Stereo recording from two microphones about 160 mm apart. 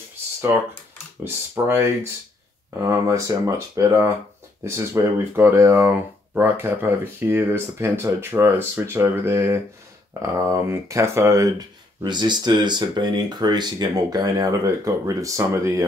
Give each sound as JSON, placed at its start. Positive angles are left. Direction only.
{"t": 1.2, "sound": "speech", "side_deg": -15}